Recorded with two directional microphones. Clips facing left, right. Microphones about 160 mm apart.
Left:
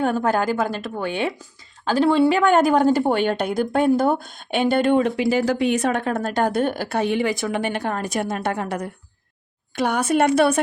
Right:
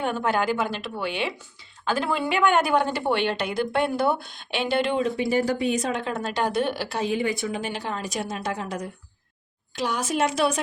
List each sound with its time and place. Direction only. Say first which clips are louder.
0.0 s a woman's voice: left 4 dB; 40° left (ahead or behind)
1.9 s a woman's voice: left 8 dB; 35° left (ahead or behind); by 5.1 s 55° left (ahead or behind)
5.1 s speech: left 3 dB; 90° left; by 10.6 s 55° left (ahead or behind)